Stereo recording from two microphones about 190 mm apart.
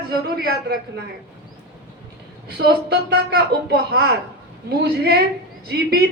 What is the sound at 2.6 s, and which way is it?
A woman's voice, 55° right (ahead or behind).